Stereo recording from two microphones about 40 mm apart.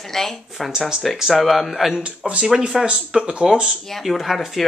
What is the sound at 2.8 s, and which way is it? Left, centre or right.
Speech, right.